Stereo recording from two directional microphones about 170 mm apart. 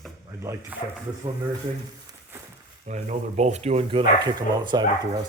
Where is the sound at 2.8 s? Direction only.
45° right (ahead or behind).